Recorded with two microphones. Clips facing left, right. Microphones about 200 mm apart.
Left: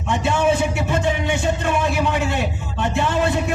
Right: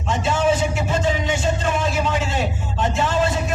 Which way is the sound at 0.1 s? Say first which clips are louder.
Left 1 dB; 60° left (ahead or behind).